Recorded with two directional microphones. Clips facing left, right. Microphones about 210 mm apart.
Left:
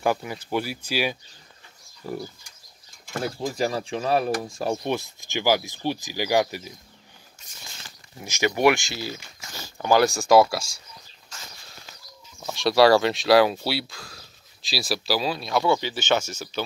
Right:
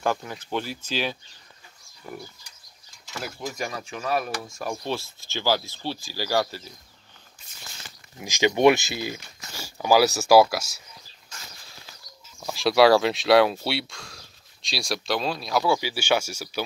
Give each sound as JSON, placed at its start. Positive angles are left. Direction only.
{"t": 0.0, "sound": "speech", "side_deg": 10}
{"t": 3.2, "sound": "speech", "side_deg": 30}
{"t": 4.8, "sound": "speech", "side_deg": 15}
{"t": 8.2, "sound": "speech", "side_deg": -15}
{"t": 12.4, "sound": "speech", "side_deg": 0}